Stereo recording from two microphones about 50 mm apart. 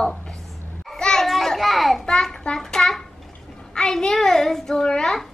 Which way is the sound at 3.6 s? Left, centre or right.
Centre.